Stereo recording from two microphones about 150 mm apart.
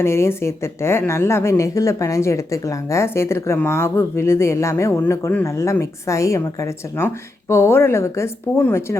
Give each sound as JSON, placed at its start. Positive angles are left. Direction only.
{"t": 0.0, "sound": "a woman's voice", "side_deg": 15}